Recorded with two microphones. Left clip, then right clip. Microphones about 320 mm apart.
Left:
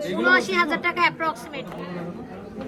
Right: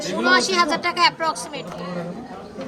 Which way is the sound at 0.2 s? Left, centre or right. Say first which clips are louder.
Right 2 dB; centre.